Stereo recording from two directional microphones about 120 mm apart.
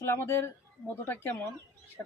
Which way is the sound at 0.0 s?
20° left (ahead or behind).